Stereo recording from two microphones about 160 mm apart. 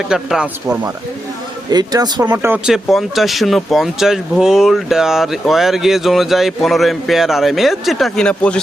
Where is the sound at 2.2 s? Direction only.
15° right (ahead or behind).